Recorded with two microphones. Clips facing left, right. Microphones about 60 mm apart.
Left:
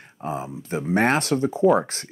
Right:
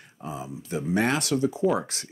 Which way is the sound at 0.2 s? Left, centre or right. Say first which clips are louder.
Left 6 dB; left.